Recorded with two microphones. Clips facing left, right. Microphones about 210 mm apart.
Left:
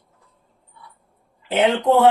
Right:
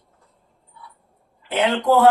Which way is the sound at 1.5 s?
25° left (ahead or behind).